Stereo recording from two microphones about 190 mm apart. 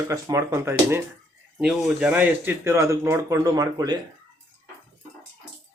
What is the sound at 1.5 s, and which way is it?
Speech, centre (ahead or behind).